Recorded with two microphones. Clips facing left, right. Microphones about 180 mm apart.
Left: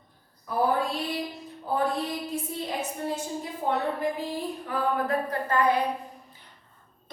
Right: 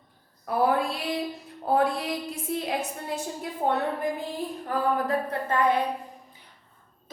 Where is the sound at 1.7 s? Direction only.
75° right (ahead or behind).